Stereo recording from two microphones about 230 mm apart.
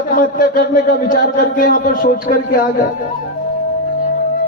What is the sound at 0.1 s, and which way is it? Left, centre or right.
A man's voice, left.